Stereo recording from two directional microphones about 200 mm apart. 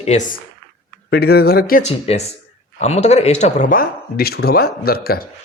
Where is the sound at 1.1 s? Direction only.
50° left (ahead or behind).